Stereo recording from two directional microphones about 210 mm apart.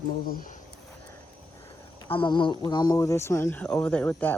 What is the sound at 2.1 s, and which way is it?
Speech, 25° left (ahead or behind).